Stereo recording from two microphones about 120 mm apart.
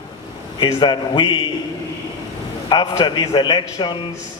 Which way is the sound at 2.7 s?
35° left (ahead or behind).